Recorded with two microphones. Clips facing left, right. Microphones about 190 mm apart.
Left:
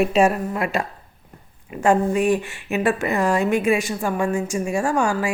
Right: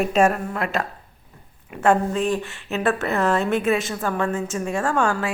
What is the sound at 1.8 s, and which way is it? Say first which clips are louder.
A woman's voice: left 2 dB; 15° left (ahead or behind).